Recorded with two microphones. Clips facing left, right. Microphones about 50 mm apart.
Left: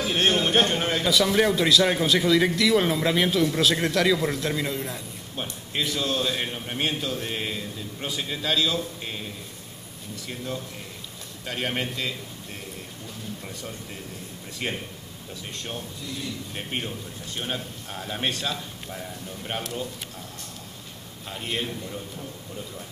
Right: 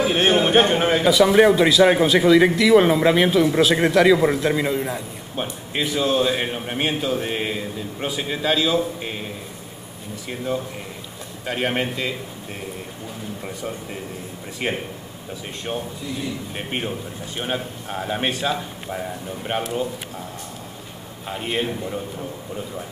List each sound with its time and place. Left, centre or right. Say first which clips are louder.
0.0 s a man's voice: right 5 dB; centre
10.3 s a man's voice: right 8 dB; centre
14.6 s a man's voice: right 6 dB; centre
21.3 s a man's voice: right 6 dB; centre